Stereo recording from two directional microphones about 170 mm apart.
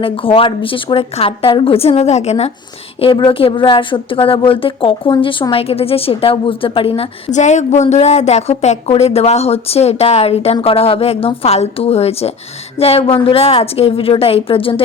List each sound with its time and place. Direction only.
0.0 s speech: 30° left (ahead or behind)